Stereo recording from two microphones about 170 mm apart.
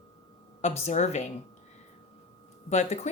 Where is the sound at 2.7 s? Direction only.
40° left (ahead or behind).